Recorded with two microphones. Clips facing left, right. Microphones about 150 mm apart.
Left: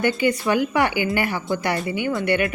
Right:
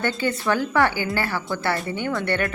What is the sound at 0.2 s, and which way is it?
A woman's voice, 15° left (ahead or behind).